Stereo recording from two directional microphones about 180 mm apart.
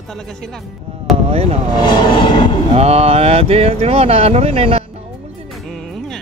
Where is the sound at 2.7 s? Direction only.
35° right (ahead or behind).